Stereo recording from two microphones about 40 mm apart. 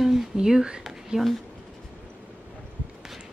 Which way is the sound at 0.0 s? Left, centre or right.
Centre.